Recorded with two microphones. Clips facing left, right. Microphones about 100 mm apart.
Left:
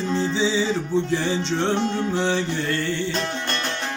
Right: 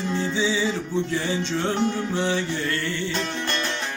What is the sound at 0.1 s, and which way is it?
Music, 25° left (ahead or behind).